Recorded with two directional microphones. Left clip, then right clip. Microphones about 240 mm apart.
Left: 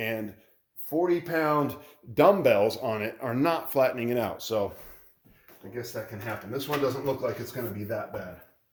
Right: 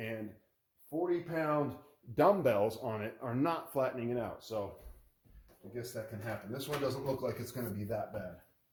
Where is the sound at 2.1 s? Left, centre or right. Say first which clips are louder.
Left 8 dB; centre.